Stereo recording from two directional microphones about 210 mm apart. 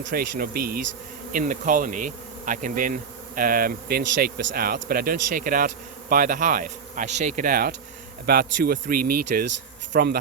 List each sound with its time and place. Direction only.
0.0 s a man's voice: 45° right (ahead or behind)
1.3 s bee: 40° right (ahead or behind)
8.3 s a man's voice: 45° right (ahead or behind)